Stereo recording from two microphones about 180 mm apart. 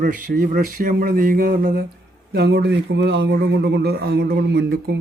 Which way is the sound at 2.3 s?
65° right (ahead or behind).